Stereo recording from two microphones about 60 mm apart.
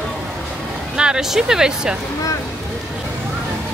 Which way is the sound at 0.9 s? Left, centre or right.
Centre.